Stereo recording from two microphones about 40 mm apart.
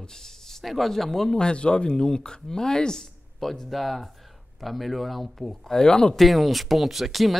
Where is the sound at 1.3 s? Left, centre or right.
Left.